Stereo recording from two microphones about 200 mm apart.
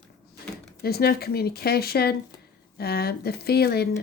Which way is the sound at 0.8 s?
50° left (ahead or behind).